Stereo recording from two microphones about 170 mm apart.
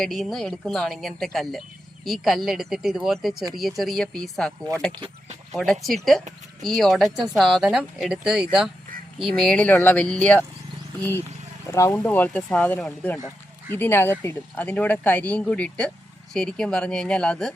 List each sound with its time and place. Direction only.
0.0 s speech: centre (ahead or behind)
4.9 s speech: 30° right (ahead or behind)
5.5 s speech: centre (ahead or behind)
11.7 s speech: 20° left (ahead or behind)